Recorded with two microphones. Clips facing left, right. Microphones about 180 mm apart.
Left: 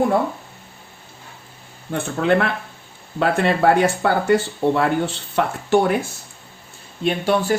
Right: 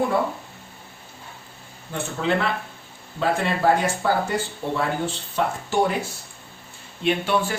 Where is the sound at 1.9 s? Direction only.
60° left (ahead or behind).